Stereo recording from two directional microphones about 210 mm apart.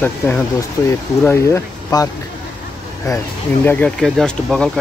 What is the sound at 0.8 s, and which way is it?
Speech, 10° left (ahead or behind).